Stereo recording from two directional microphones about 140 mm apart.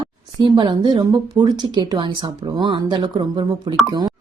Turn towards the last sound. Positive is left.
turn(degrees=-30)  # may be behind; listen again after turning